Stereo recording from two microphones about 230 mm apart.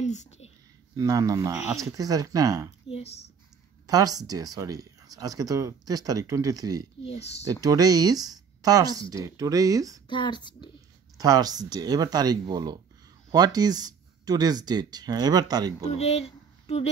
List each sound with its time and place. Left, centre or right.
0.0 s a sound: left
0.9 s speech: centre
2.9 s speech: left
3.8 s speech: centre
7.1 s speech: left
7.4 s speech: centre
10.0 s speech: centre
11.1 s speech: centre
15.9 s speech: left